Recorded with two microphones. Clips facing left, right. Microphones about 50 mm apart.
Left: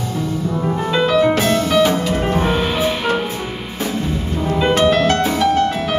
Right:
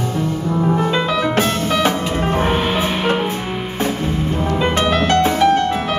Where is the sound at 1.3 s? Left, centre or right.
Right.